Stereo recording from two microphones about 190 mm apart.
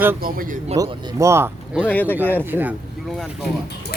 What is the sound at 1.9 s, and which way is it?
Speech, 10° left (ahead or behind).